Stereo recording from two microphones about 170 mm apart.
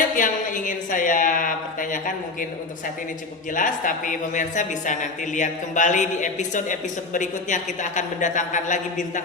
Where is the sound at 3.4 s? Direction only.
50° left (ahead or behind).